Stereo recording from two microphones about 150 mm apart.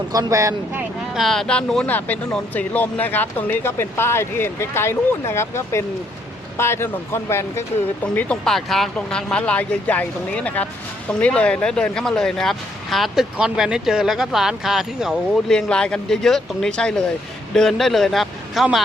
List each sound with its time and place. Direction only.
0.1 s speech: 20° right (ahead or behind)
1.2 s speech: 5° left (ahead or behind)